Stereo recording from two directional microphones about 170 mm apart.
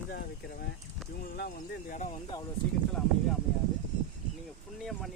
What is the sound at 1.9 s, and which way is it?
Speech, 50° left (ahead or behind).